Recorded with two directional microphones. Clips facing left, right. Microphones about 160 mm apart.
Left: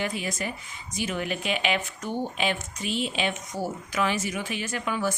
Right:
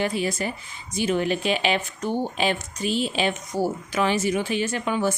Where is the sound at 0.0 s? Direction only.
30° right (ahead or behind).